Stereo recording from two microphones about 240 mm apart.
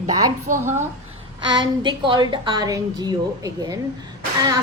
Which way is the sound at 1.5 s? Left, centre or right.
Centre.